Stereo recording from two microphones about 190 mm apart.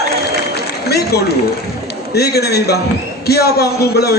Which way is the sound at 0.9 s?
55° left (ahead or behind).